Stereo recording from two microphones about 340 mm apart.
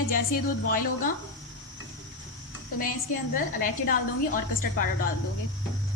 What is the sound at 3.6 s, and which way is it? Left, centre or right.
Speech, left.